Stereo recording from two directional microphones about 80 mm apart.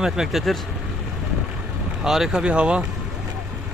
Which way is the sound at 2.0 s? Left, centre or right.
Centre.